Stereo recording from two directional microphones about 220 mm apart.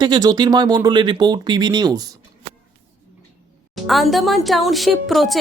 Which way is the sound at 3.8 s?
Centre (ahead or behind).